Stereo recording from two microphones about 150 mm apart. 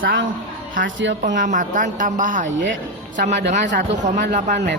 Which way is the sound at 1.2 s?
60° right (ahead or behind).